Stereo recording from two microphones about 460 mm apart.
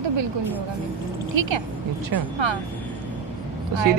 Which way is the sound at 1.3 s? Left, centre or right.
Right.